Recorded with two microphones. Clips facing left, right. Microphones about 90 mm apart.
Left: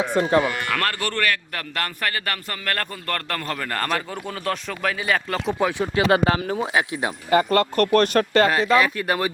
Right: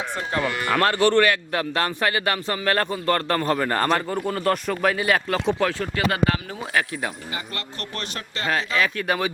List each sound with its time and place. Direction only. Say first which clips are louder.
0.3 s a man's voice: left 1 dB; 5° left (ahead or behind)
0.7 s a man's voice: right 6 dB; 20° right (ahead or behind)
3.8 s a man's voice: right 4 dB; 5° right (ahead or behind)
5.5 s speech: even; 10° left (ahead or behind)
5.8 s speech: left 4 dB; 25° left (ahead or behind)
7.3 s speech: left 15 dB; 55° left (ahead or behind)
8.8 s a man's voice: left 1 dB; centre (ahead or behind)